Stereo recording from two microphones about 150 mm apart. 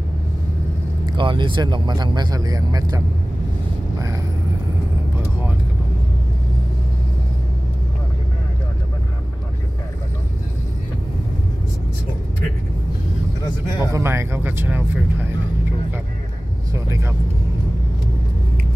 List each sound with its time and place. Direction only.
1.0 s speech: 30° right (ahead or behind)
13.7 s speech: 20° right (ahead or behind)
16.7 s speech: 20° right (ahead or behind)